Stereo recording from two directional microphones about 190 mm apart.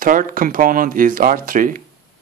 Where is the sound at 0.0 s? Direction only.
45° right (ahead or behind).